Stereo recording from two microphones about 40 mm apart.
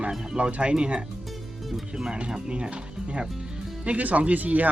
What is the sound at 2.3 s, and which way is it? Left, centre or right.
Speech, right.